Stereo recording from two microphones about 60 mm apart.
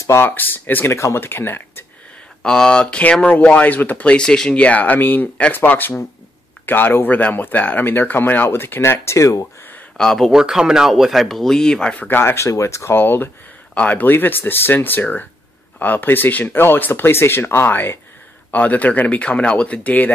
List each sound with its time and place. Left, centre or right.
0.2 s speech: left
0.9 s speech: left
2.4 s speech: centre
4.6 s speech: left
9.0 s speech: left
9.9 s speech: centre
10.3 s speech: centre
12.2 s speech: left
12.4 s speech: left
12.9 s speech: left